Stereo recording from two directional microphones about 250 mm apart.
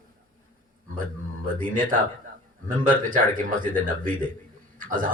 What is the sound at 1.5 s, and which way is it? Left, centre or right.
A man's voice, right.